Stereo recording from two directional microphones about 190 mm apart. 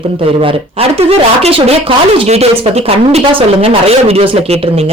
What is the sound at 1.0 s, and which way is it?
Speech, 30° right (ahead or behind).